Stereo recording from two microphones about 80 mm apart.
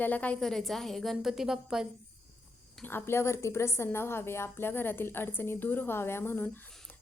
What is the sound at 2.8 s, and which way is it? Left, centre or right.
A woman's voice, left.